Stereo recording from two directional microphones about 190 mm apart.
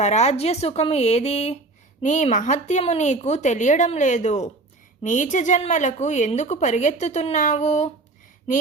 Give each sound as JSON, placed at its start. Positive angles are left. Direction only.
{"t": 0.0, "sound": "a woman's voice", "side_deg": 35}